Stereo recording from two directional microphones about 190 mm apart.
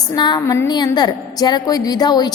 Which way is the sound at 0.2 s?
20° left (ahead or behind).